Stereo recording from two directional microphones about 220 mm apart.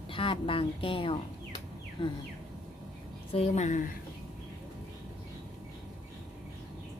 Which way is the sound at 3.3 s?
30° left (ahead or behind).